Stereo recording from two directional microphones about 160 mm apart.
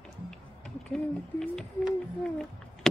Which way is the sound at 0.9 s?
5° left (ahead or behind).